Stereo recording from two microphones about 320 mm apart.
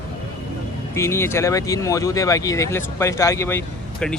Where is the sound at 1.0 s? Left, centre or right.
Centre.